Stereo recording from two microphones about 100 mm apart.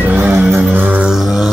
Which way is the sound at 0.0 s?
20° right (ahead or behind).